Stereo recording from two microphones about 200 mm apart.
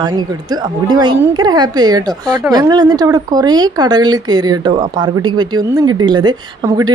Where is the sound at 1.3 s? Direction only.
20° right (ahead or behind).